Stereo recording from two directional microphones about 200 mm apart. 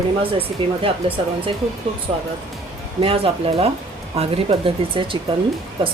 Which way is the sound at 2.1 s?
30° right (ahead or behind).